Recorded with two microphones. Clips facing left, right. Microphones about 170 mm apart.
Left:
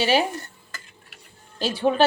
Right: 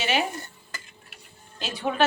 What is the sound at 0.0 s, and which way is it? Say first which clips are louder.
Speech: left 5 dB; 35° left (ahead or behind).